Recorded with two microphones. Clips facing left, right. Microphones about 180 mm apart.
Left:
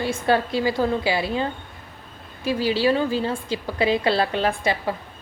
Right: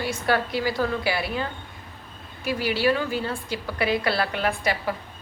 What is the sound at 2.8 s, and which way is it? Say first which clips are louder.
A woman's voice: left 1 dB; 25° left (ahead or behind).